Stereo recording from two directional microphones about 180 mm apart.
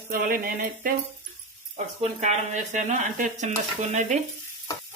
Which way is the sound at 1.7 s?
40° right (ahead or behind).